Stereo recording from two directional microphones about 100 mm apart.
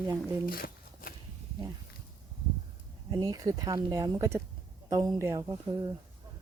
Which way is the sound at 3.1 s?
40° right (ahead or behind).